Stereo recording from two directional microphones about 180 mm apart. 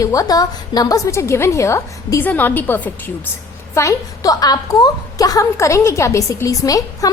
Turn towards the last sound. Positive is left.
turn(degrees=20)  # may be behind; listen again after turning